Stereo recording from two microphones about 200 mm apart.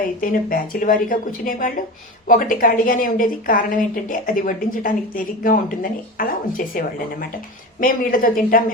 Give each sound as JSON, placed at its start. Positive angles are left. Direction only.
{"t": 0.0, "sound": "a woman's voice", "side_deg": 45}
{"t": 7.8, "sound": "a woman's voice", "side_deg": 45}